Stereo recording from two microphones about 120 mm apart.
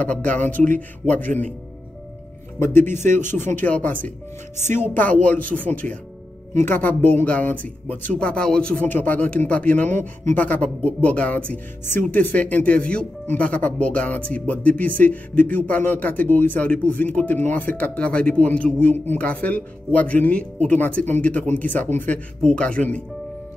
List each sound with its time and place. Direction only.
0.0 s speech: 10° left (ahead or behind)
2.8 s speech: 90° right
3.5 s speech: 10° left (ahead or behind)